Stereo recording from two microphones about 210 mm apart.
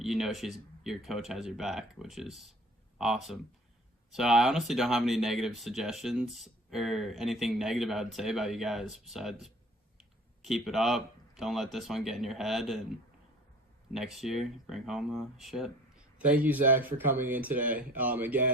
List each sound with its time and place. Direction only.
0.0 s speech: centre (ahead or behind)
13.9 s speech: centre (ahead or behind)